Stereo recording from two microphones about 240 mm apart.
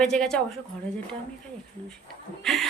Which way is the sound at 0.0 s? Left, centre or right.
Centre.